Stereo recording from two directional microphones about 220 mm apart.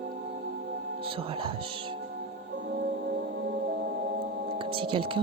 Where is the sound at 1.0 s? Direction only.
25° right (ahead or behind).